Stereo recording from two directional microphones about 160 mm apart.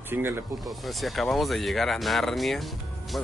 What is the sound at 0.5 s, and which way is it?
Speech, centre (ahead or behind).